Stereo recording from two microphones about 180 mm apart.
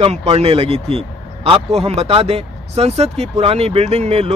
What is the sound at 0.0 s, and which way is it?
Speech, 35° right (ahead or behind).